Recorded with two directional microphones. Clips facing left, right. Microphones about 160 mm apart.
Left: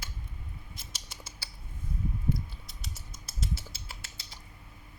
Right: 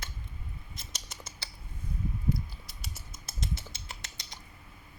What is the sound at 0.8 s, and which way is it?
Rodents, 5° left (ahead or behind).